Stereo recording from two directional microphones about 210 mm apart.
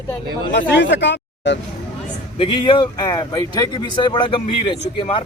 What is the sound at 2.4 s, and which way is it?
Speech, 25° left (ahead or behind).